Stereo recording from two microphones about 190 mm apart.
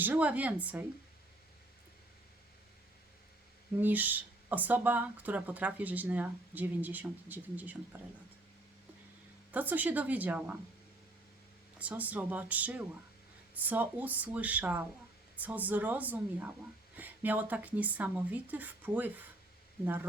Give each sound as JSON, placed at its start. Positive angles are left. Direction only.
{"t": 0.0, "sound": "speech", "side_deg": -10}
{"t": 3.8, "sound": "speech", "side_deg": -10}
{"t": 9.5, "sound": "speech", "side_deg": -10}
{"t": 11.8, "sound": "speech", "side_deg": -5}